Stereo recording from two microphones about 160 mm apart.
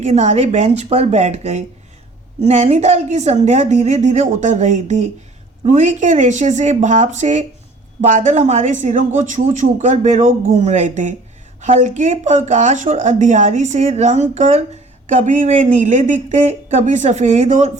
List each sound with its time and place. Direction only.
0.0 s speech: 45° right (ahead or behind)